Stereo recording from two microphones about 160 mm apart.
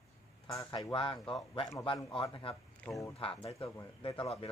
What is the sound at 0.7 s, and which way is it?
A man's voice, 35° left (ahead or behind).